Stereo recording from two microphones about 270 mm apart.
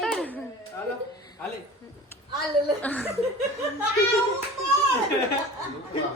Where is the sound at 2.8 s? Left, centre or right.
Centre.